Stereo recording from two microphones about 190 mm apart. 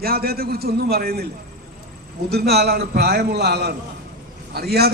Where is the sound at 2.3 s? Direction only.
60° right (ahead or behind).